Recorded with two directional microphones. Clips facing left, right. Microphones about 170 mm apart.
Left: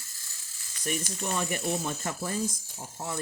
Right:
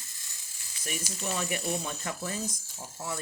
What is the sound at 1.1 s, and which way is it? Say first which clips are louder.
Speech: left 2 dB; 55° left (ahead or behind).